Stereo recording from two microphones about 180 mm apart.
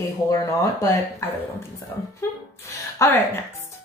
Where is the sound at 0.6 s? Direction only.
15° left (ahead or behind).